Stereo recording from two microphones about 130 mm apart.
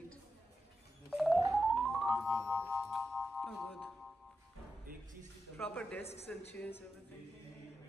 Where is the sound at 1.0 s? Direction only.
Centre (ahead or behind).